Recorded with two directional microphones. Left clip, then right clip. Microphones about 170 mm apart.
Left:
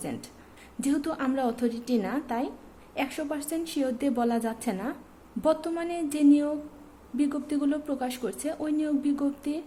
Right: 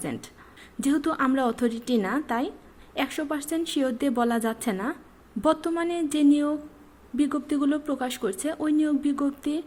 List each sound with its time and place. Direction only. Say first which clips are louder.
0.0 s speech: right 3 dB; 20° right (ahead or behind)